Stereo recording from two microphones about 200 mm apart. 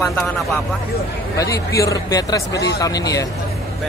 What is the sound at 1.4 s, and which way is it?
Speech, 15° left (ahead or behind).